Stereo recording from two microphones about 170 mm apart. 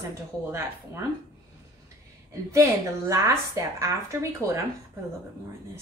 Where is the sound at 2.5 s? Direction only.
15° right (ahead or behind).